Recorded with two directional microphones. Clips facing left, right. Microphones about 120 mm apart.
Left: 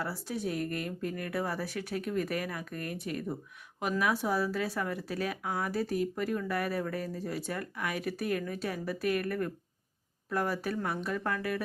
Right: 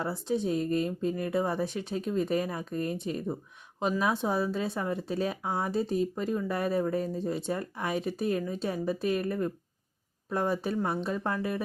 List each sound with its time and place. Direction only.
0.0 s speech: 25° right (ahead or behind)